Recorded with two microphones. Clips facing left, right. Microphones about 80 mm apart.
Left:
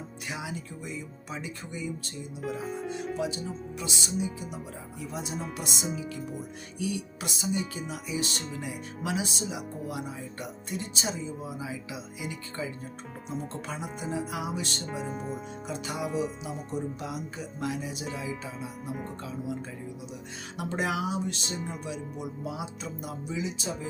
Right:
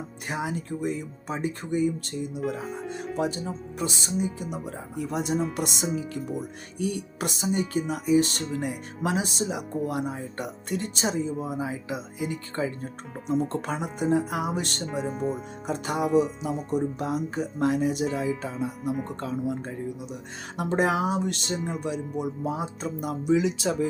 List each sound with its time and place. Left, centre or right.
0.3 s speech: right
2.4 s speech: centre
3.2 s speech: right
4.5 s speech: right
15.0 s speech: centre
15.6 s speech: right
16.0 s speech: centre
16.7 s speech: right
18.9 s speech: centre
19.2 s speech: right
20.7 s speech: right